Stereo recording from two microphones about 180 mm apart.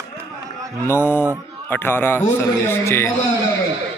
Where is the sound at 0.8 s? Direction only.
10° left (ahead or behind).